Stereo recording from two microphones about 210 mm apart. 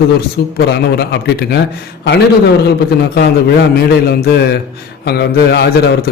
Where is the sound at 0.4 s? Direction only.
50° left (ahead or behind).